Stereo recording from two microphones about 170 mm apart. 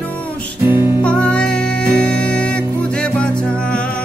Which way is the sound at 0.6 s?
15° right (ahead or behind).